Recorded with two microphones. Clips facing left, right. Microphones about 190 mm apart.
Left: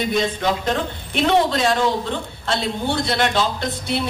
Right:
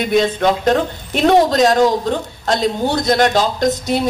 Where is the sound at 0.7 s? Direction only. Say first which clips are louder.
Right 7 dB; 40° right (ahead or behind).